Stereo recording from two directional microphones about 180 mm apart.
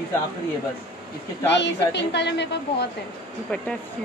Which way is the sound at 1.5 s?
75° left (ahead or behind).